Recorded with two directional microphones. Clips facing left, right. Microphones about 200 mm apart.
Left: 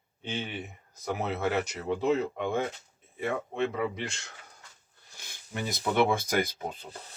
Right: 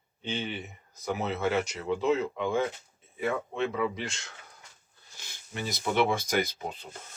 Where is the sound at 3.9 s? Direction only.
60° left (ahead or behind).